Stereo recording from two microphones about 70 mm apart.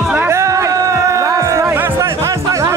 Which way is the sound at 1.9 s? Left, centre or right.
Right.